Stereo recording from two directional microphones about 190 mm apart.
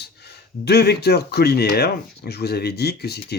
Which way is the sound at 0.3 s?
60° left (ahead or behind).